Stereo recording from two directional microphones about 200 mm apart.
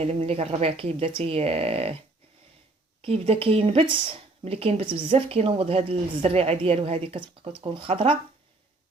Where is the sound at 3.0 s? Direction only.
30° right (ahead or behind).